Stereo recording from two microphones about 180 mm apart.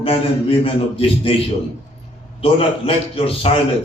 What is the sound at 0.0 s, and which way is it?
A man's voice, 30° left (ahead or behind).